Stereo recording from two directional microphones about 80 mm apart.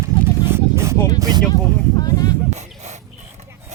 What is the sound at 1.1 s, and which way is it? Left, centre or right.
Speech, right.